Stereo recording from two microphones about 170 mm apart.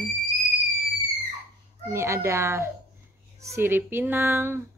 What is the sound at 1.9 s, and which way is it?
Speech, 15° right (ahead or behind).